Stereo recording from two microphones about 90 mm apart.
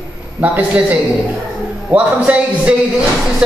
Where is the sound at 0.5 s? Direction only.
15° right (ahead or behind).